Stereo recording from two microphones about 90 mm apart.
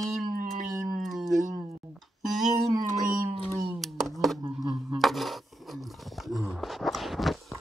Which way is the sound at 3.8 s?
Centre (ahead or behind).